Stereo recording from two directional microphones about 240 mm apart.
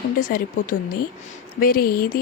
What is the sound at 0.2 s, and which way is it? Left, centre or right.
Speech, left.